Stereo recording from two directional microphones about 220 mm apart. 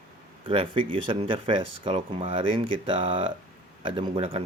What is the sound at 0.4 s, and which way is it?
Speech, 25° right (ahead or behind).